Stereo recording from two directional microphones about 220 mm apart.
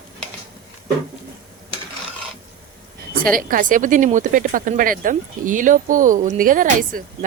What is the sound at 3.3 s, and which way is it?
Speech, 40° right (ahead or behind).